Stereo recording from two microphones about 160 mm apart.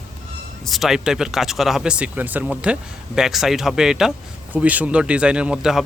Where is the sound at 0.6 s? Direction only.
Centre (ahead or behind).